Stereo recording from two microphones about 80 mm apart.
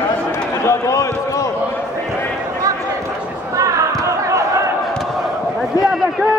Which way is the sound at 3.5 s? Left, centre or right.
Right.